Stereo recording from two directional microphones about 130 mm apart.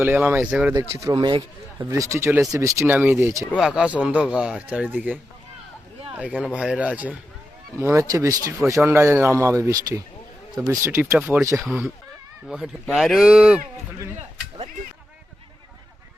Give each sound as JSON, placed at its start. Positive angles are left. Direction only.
{"t": 0.0, "sound": "speech", "side_deg": -15}
{"t": 0.7, "sound": "speech", "side_deg": -25}
{"t": 3.5, "sound": "speech", "side_deg": -5}
{"t": 6.4, "sound": "speech", "side_deg": -5}
{"t": 7.8, "sound": "speech", "side_deg": -20}
{"t": 11.0, "sound": "speech", "side_deg": -15}
{"t": 12.5, "sound": "speech", "side_deg": -5}